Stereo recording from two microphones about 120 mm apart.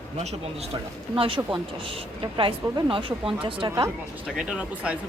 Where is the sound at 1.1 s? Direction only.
45° right (ahead or behind).